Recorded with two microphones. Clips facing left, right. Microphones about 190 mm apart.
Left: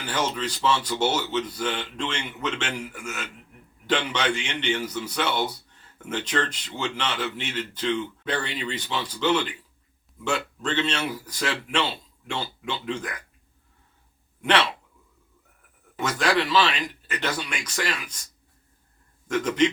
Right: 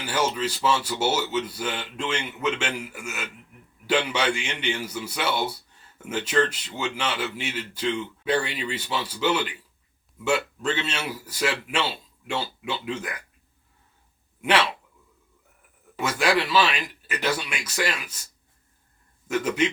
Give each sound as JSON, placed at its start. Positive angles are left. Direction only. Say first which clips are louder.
{"t": 0.0, "sound": "a man's voice", "louder": "right 2 dB", "side_deg": -10}
{"t": 14.4, "sound": "a man's voice", "louder": "even", "side_deg": -5}
{"t": 16.0, "sound": "a man's voice", "louder": "right 1 dB", "side_deg": -10}
{"t": 19.3, "sound": "a man's voice", "louder": "even", "side_deg": -5}